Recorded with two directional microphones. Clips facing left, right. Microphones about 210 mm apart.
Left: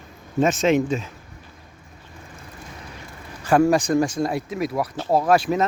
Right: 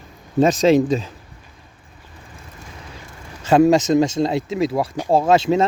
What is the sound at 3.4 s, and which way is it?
Speech, 25° right (ahead or behind).